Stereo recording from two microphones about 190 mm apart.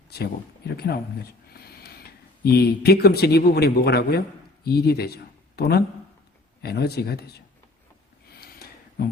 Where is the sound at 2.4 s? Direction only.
55° left (ahead or behind).